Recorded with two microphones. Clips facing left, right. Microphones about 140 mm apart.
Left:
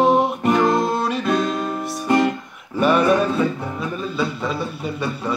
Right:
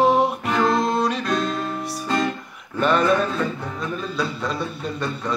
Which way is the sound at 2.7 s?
10° left (ahead or behind).